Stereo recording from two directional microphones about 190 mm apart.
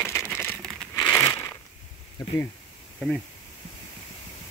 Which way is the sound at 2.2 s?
20° left (ahead or behind).